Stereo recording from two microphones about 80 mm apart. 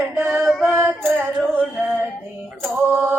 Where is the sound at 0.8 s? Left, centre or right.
Right.